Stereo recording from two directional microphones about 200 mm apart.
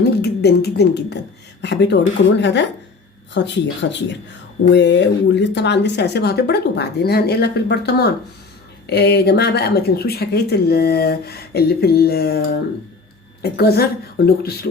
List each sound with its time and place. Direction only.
0.0 s speech: 55° left (ahead or behind)
13.4 s speech: 50° left (ahead or behind)